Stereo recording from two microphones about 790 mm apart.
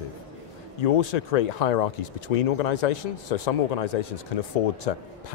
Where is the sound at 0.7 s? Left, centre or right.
Left.